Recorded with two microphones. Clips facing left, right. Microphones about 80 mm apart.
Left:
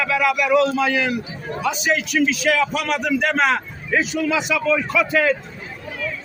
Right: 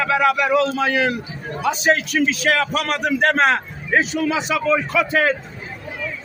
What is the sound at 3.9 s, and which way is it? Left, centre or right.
A man's voice, right.